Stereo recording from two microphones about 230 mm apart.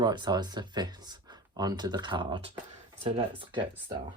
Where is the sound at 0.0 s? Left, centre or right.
Centre.